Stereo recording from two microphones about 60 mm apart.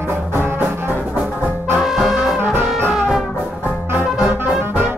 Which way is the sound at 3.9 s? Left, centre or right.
Right.